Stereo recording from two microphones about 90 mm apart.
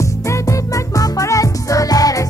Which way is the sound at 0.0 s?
35° left (ahead or behind).